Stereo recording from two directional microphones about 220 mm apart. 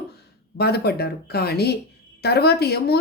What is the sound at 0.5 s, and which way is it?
Speech, 45° left (ahead or behind).